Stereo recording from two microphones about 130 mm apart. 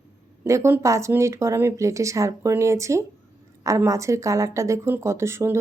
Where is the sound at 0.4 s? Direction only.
20° right (ahead or behind).